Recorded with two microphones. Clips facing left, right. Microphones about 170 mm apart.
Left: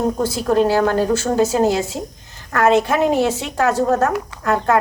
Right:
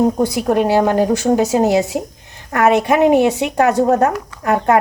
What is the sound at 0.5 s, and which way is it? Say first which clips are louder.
A woman's voice: right 1 dB; 15° right (ahead or behind).